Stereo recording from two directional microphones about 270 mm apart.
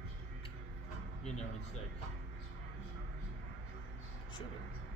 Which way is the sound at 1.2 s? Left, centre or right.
Left.